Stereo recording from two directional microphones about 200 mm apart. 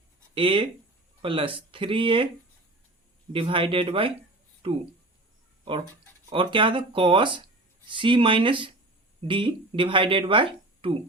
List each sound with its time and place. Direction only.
0.3 s speech: 25° right (ahead or behind)
3.3 s speech: 25° right (ahead or behind)
6.3 s speech: 25° right (ahead or behind)